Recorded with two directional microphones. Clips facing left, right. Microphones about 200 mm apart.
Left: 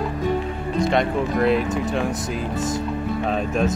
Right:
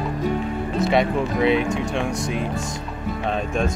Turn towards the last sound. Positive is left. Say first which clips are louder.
# left 2 dB
turn(degrees=5)  # may be behind; listen again after turning